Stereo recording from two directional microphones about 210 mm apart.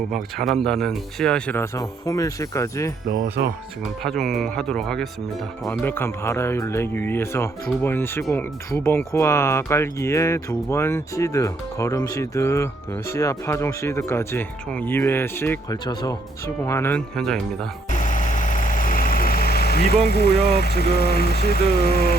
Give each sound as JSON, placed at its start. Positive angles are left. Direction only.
{"t": 0.1, "sound": "speech", "side_deg": 0}
{"t": 4.0, "sound": "speech", "side_deg": 0}
{"t": 17.9, "sound": "vehicle", "side_deg": 35}